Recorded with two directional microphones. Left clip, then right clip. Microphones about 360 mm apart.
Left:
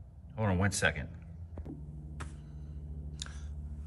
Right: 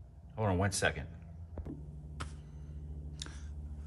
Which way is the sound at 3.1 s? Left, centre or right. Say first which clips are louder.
Left 2 dB; right.